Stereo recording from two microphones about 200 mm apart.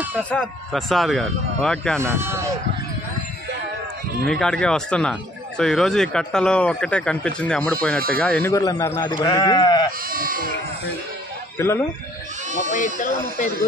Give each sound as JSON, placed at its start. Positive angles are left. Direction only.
{"t": 0.0, "sound": "a sound", "side_deg": -10}
{"t": 0.3, "sound": "speech", "side_deg": 5}
{"t": 2.0, "sound": "speech", "side_deg": -10}
{"t": 4.3, "sound": "a man's voice", "side_deg": 5}
{"t": 10.0, "sound": "speech", "side_deg": -45}
{"t": 11.5, "sound": "speech", "side_deg": 10}
{"t": 12.7, "sound": "speech", "side_deg": 40}